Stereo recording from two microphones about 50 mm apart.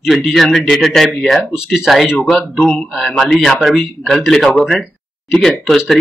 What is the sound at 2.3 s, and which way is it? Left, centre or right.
Speech, centre.